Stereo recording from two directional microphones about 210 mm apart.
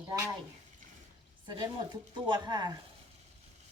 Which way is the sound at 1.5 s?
20° right (ahead or behind).